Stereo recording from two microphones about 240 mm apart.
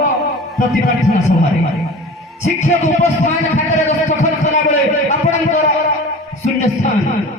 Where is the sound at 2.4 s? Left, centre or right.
Left.